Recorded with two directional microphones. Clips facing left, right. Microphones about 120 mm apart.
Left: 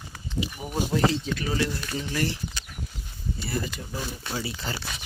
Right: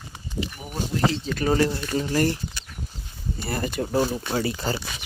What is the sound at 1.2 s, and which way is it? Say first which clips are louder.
Speech: right 6 dB; 45° right (ahead or behind).